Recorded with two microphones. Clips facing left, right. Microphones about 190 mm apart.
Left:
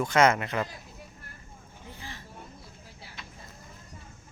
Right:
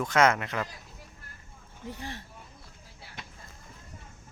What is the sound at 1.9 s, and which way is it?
Speech, 65° right (ahead or behind).